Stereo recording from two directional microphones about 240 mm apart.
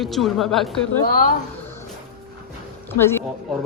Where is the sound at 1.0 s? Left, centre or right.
Left.